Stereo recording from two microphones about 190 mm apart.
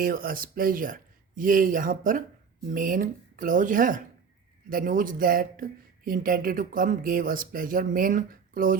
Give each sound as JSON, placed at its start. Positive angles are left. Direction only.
{"t": 0.0, "sound": "speech", "side_deg": -50}